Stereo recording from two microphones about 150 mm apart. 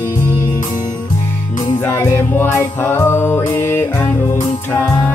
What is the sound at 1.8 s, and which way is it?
Music, 15° left (ahead or behind).